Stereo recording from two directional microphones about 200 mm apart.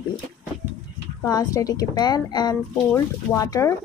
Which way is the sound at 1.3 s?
15° left (ahead or behind).